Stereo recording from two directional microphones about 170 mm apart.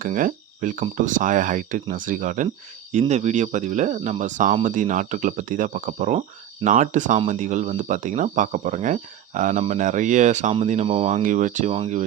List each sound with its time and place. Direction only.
0.0 s speech: 50° right (ahead or behind)